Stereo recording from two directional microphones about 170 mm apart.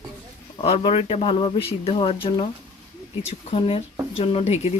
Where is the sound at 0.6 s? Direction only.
35° left (ahead or behind).